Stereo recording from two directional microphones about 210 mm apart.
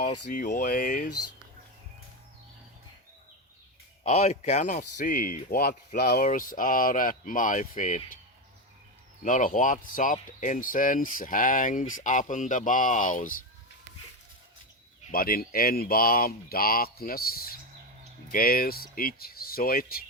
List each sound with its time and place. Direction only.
0.3 s speech: 40° left (ahead or behind)
4.0 s speech: 30° left (ahead or behind)
9.2 s speech: 40° left (ahead or behind)
15.1 s speech: 45° left (ahead or behind)